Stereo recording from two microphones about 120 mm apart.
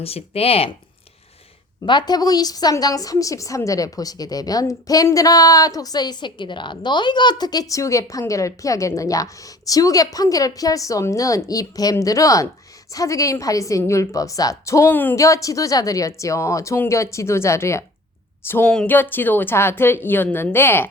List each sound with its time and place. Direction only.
0.0 s speech: 55° left (ahead or behind)
1.8 s a woman's voice: 40° left (ahead or behind); by 20.9 s 20° left (ahead or behind)